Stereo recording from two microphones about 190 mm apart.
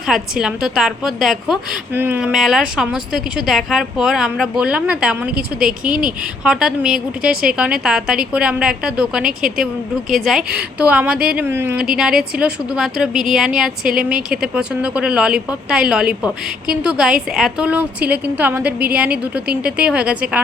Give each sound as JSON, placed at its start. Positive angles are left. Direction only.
{"t": 0.1, "sound": "a woman's voice", "side_deg": -5}
{"t": 5.9, "sound": "a woman's voice", "side_deg": -45}
{"t": 6.4, "sound": "a woman's voice", "side_deg": -5}
{"t": 7.2, "sound": "a woman's voice", "side_deg": -50}
{"t": 7.5, "sound": "a woman's voice", "side_deg": -5}
{"t": 9.2, "sound": "a woman's voice", "side_deg": -50}
{"t": 10.3, "sound": "a woman's voice", "side_deg": 0}
{"t": 14.1, "sound": "a woman's voice", "side_deg": -50}
{"t": 14.5, "sound": "a woman's voice", "side_deg": -5}